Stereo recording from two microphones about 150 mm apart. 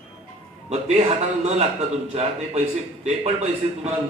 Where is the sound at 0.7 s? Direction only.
45° right (ahead or behind).